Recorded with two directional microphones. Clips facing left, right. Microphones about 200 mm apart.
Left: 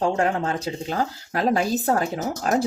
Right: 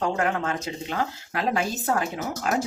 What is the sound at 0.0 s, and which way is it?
A woman's voice, 30° left (ahead or behind).